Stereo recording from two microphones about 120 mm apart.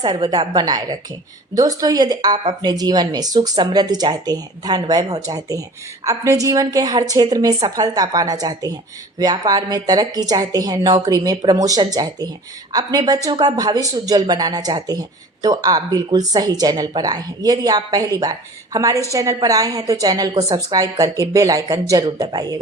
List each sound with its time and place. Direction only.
0.3 s a woman's voice: 35° right (ahead or behind)